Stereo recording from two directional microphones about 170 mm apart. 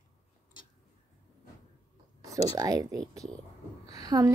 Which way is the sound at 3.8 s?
20° right (ahead or behind).